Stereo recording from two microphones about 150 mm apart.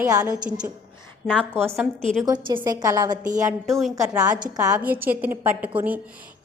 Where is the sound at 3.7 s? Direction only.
Centre (ahead or behind).